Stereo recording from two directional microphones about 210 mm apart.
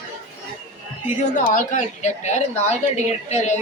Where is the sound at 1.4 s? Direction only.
35° left (ahead or behind).